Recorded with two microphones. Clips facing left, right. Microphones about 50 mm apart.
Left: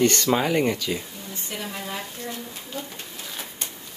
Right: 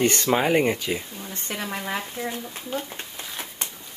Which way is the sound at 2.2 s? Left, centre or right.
Right.